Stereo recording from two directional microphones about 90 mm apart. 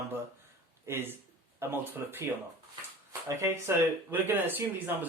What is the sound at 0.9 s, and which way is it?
Speech, 25° right (ahead or behind).